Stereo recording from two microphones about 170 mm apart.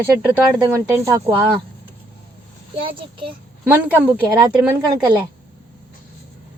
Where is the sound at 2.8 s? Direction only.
30° right (ahead or behind).